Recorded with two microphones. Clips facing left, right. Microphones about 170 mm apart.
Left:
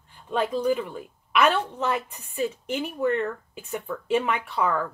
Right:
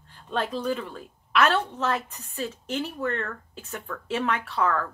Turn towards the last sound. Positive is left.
turn(degrees=15)  # may be behind; listen again after turning